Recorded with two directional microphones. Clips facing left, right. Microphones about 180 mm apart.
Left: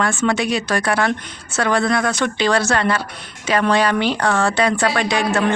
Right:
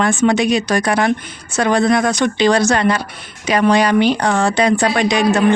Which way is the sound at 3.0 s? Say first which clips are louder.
Even; centre (ahead or behind).